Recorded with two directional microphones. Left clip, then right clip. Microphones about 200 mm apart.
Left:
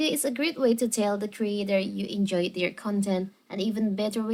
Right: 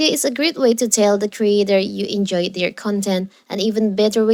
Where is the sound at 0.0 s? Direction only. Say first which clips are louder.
Right 9 dB; 40° right (ahead or behind).